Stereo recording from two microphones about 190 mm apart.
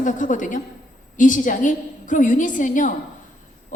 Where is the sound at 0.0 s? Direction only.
40° left (ahead or behind).